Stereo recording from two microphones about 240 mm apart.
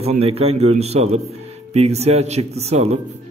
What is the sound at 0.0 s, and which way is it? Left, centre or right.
A man's voice, right.